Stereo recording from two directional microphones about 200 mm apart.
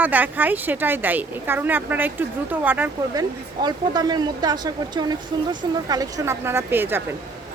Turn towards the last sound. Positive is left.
turn(degrees=-10)  # may be behind; listen again after turning